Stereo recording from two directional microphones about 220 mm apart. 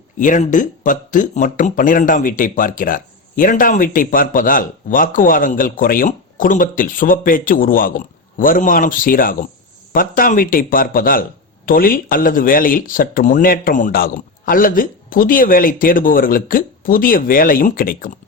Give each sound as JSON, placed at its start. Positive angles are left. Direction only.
{"t": 0.2, "sound": "speech", "side_deg": 35}